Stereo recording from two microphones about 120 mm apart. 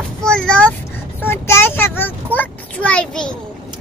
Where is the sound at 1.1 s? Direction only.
20° left (ahead or behind).